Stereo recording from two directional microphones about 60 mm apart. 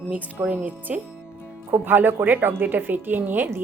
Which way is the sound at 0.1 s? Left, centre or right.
Right.